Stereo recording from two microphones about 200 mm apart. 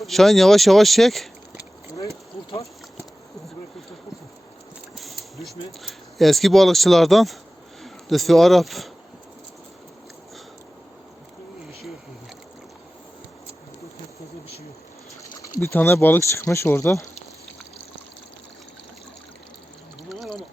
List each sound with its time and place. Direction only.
0.0 s speech: centre (ahead or behind)
2.5 s a sound: 15° left (ahead or behind)
4.9 s speech: centre (ahead or behind)
15.2 s speech: 15° left (ahead or behind)
20.1 s pour: centre (ahead or behind)